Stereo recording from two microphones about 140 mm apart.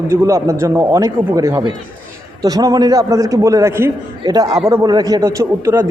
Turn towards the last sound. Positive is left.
turn(degrees=-20)  # may be behind; listen again after turning